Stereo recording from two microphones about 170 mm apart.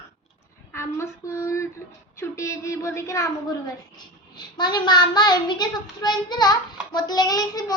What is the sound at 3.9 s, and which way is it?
A child's voice, 25° left (ahead or behind).